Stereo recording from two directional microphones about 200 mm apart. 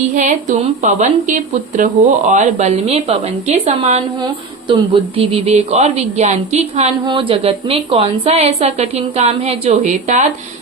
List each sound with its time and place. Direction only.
0.1 s a woman's voice: 40° right (ahead or behind)